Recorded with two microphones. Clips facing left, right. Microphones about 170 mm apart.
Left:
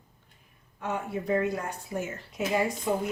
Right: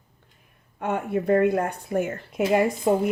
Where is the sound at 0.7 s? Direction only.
60° right (ahead or behind).